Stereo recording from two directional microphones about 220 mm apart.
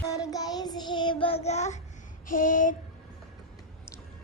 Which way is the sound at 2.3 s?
35° left (ahead or behind).